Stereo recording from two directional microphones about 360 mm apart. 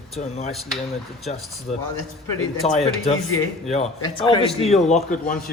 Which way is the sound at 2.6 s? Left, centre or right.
Centre.